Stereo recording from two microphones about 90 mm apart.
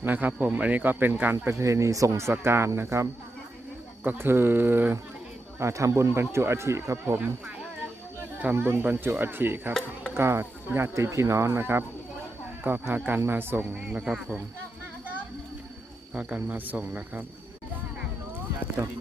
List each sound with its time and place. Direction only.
0.0 s speech: 20° right (ahead or behind)
1.5 s speech: 35° right (ahead or behind)
5.5 s speech: 30° right (ahead or behind)
8.5 s speech: 25° right (ahead or behind)
13.8 s speech: 10° right (ahead or behind)
16.1 s speech: 15° right (ahead or behind)